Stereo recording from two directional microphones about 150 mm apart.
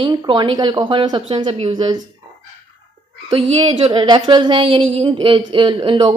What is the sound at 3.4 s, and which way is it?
A woman's voice, 40° right (ahead or behind).